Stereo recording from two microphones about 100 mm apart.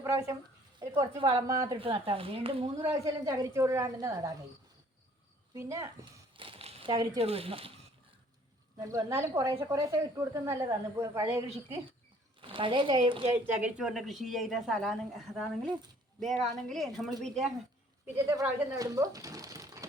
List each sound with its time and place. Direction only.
0.0 s speech: 30° right (ahead or behind)
0.8 s speech: 50° right (ahead or behind)
1.4 s a woman's voice: 35° right (ahead or behind)
1.7 s speech: 60° right (ahead or behind)
2.8 s a woman's voice: 35° right (ahead or behind)
5.5 s a woman's voice: 30° right (ahead or behind)
6.3 s a sound: 60° right (ahead or behind); by 6.9 s 80° right
6.9 s a woman's voice: 35° right (ahead or behind)
7.2 s speech: 75° right (ahead or behind)
8.8 s a woman's voice: 35° right (ahead or behind)
12.4 s speech: 60° right (ahead or behind)
13.0 s speech: 65° right (ahead or behind)
13.3 s speech: 15° right (ahead or behind); by 17.5 s centre (ahead or behind)
18.7 s speech: 35° right (ahead or behind)